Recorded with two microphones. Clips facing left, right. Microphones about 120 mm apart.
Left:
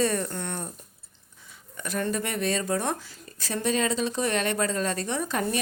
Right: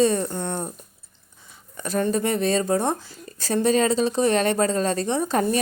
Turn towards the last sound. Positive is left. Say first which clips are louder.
# right 6 dB
turn(degrees=-35)  # may be behind; listen again after turning